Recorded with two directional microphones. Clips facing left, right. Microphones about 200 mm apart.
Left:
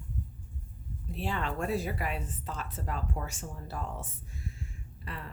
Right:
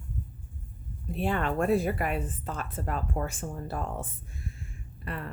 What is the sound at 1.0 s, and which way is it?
Speech, 55° right (ahead or behind).